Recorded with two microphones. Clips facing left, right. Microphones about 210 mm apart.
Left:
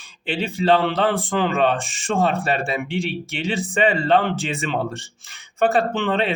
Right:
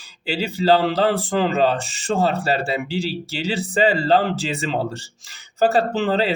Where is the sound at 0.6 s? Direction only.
30° right (ahead or behind).